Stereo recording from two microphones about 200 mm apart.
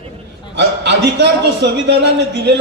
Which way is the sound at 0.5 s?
60° right (ahead or behind).